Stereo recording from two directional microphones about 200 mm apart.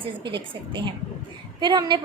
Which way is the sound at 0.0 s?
25° right (ahead or behind).